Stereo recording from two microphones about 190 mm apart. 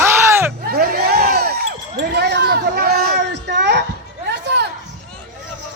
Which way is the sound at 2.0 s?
60° right (ahead or behind).